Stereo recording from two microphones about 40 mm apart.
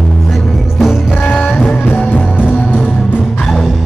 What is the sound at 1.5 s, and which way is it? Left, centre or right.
Music, left.